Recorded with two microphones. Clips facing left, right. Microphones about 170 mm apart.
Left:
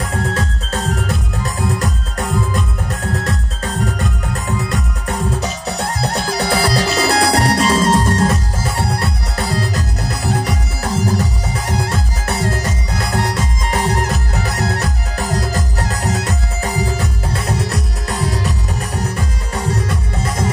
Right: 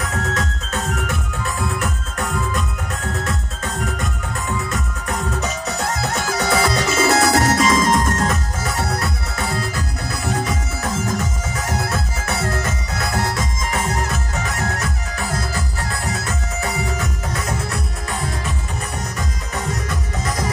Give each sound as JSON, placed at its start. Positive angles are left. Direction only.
{"t": 0.0, "sound": "music", "side_deg": 30}
{"t": 10.8, "sound": "music", "side_deg": 35}